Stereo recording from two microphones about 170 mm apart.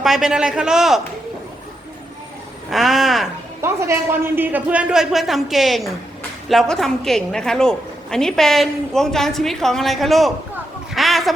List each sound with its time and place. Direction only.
0.0 s a woman's voice: centre (ahead or behind)
2.6 s a woman's voice: centre (ahead or behind)
3.6 s a woman's voice: 15° right (ahead or behind); by 10.3 s centre (ahead or behind)
10.9 s a sound: centre (ahead or behind)